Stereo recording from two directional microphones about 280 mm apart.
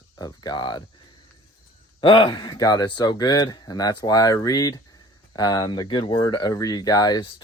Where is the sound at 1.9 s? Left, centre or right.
Centre.